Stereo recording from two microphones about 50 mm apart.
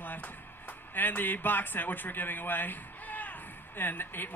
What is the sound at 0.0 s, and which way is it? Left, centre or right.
Speech, left.